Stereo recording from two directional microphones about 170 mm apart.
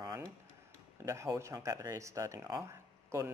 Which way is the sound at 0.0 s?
20° right (ahead or behind).